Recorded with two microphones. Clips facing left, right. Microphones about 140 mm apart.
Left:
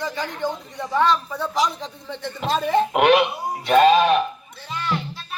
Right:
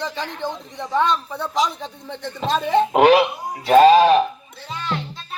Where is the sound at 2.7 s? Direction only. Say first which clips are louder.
Right 3 dB; 35° right (ahead or behind).